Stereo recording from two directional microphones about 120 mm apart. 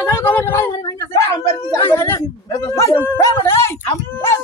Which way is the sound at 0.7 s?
30° left (ahead or behind).